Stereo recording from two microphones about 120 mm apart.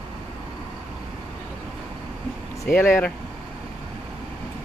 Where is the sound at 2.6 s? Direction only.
20° left (ahead or behind).